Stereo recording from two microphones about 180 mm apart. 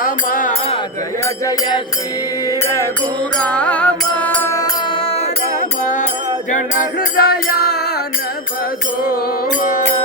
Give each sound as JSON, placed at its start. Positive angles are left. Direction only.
{"t": 0.0, "sound": "music", "side_deg": 50}
{"t": 3.4, "sound": "music", "side_deg": 5}
{"t": 7.2, "sound": "music", "side_deg": 60}